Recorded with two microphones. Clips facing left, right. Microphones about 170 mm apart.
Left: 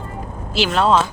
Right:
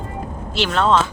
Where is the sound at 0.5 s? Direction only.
5° left (ahead or behind).